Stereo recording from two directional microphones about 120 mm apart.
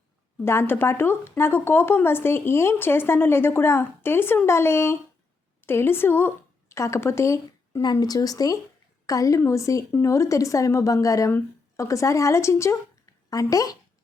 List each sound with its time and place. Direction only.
0.4 s a woman's voice: 20° left (ahead or behind)
7.8 s speech: 35° left (ahead or behind)